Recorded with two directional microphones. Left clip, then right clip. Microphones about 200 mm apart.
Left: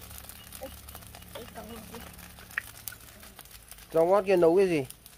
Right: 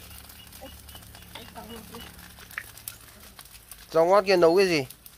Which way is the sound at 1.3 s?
60° left (ahead or behind).